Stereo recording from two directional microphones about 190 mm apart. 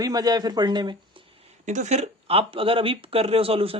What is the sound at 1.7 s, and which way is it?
Speech, 40° right (ahead or behind).